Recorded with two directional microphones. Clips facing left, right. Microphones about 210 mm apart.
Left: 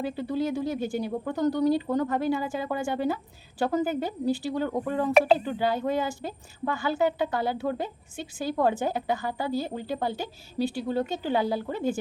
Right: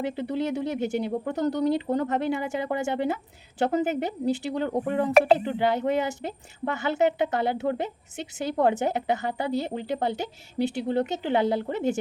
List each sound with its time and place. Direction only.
0.0 s speech: 20° right (ahead or behind)